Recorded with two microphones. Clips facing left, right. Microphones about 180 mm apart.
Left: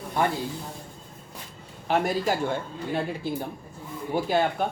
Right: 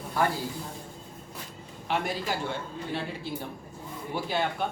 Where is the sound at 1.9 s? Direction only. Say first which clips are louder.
Left 6 dB; 45° left (ahead or behind).